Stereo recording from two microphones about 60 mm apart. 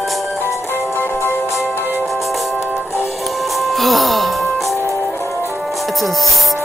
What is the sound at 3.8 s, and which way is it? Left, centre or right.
Music, centre.